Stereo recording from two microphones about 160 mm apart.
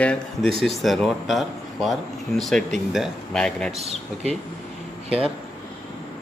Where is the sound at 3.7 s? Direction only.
40° right (ahead or behind).